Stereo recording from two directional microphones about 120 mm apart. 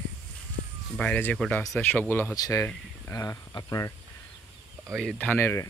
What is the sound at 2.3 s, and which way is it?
Speech, 30° left (ahead or behind).